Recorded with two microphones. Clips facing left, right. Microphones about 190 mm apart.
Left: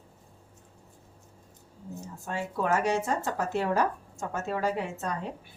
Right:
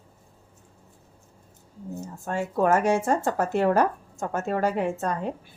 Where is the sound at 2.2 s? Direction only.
50° right (ahead or behind).